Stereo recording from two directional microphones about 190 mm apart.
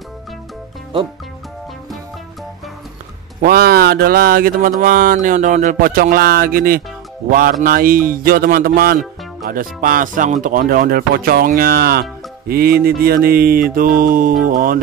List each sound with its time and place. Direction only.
3.3 s speech: 50° right (ahead or behind)